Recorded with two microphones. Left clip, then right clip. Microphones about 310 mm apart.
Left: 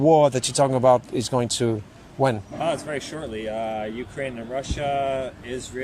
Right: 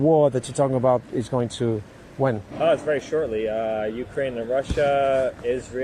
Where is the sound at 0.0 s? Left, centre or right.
Left.